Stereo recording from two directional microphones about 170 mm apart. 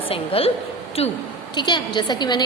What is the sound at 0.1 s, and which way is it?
A woman's voice, 35° left (ahead or behind).